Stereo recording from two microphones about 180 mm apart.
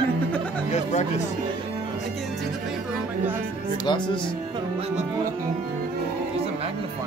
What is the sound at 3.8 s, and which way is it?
Speech, 25° left (ahead or behind).